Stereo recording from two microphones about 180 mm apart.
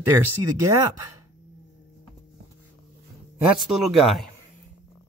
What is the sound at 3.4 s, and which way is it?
Speech, centre (ahead or behind).